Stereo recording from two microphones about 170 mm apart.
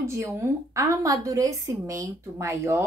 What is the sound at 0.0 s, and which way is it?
A woman's voice, 15° right (ahead or behind).